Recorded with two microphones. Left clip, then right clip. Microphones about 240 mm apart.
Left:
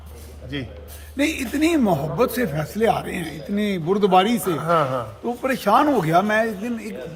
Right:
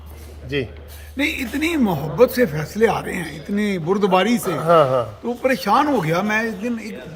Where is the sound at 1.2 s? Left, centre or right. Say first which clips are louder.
Even; centre.